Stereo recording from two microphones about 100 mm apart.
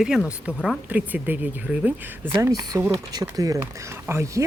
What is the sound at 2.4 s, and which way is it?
Speech, 35° right (ahead or behind).